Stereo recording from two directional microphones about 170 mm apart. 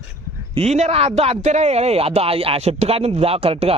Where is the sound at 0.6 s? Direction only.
40° right (ahead or behind).